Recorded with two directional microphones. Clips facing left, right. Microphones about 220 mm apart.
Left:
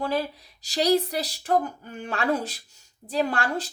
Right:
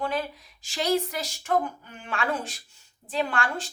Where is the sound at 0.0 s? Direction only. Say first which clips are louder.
Left 3 dB; 35° left (ahead or behind).